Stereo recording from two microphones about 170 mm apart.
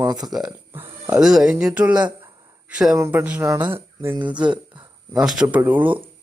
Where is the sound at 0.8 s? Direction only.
10° right (ahead or behind).